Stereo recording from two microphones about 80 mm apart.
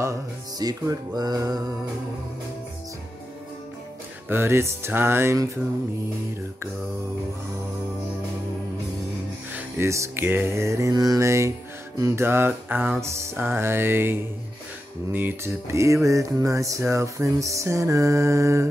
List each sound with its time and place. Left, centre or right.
0.6 s music: right
4.3 s music: right
9.8 s music: right
10.9 s music: right
15.1 s music: right
15.7 s music: right